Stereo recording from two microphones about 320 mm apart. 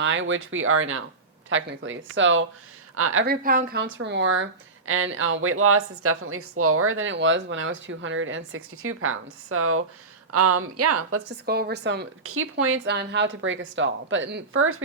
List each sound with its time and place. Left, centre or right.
0.0 s speech: right
3.2 s a woman's voice: right
11.4 s speech: right